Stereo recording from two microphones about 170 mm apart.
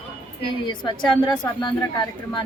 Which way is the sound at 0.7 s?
25° left (ahead or behind).